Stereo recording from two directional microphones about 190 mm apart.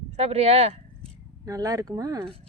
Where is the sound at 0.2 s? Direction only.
35° right (ahead or behind).